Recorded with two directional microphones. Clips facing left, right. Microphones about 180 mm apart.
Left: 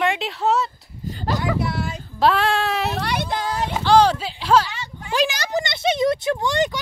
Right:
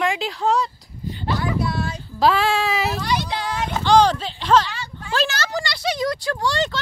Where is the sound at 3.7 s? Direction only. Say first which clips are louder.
Even; 5° left (ahead or behind).